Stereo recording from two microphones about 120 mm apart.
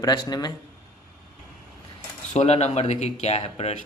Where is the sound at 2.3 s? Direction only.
65° left (ahead or behind).